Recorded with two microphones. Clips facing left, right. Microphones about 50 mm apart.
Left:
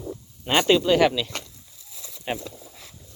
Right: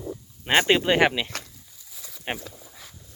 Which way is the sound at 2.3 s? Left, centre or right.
Right.